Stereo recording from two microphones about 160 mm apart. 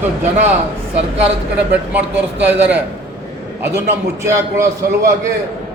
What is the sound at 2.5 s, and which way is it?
Speech, 10° right (ahead or behind).